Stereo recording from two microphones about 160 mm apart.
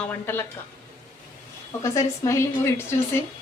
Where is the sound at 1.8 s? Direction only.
20° left (ahead or behind).